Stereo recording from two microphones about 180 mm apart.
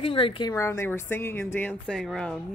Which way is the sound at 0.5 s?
15° left (ahead or behind).